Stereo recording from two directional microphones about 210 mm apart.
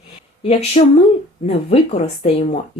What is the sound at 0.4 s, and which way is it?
Speech, 30° left (ahead or behind).